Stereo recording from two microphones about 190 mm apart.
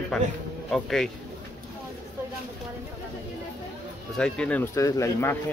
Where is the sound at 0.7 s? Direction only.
Centre (ahead or behind).